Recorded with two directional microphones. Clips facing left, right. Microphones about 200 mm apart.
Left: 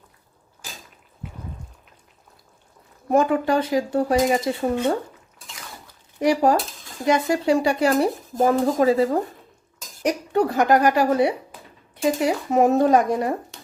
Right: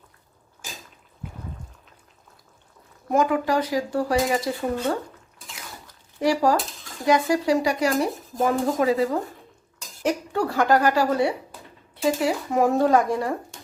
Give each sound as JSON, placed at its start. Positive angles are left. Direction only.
{"t": 3.1, "sound": "speech", "side_deg": 30}
{"t": 6.1, "sound": "speech", "side_deg": 20}
{"t": 10.0, "sound": "speech", "side_deg": 20}